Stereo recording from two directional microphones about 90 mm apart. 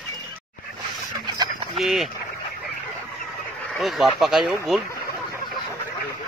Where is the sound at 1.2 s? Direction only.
50° right (ahead or behind).